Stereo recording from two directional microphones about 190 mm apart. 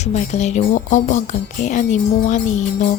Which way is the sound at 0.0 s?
35° left (ahead or behind).